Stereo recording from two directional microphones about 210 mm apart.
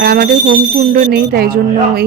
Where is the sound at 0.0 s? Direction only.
50° right (ahead or behind).